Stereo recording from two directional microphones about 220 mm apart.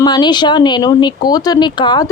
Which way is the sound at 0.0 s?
20° left (ahead or behind).